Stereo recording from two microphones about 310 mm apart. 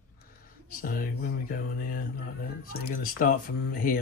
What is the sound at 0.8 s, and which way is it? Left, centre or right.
Speech, left.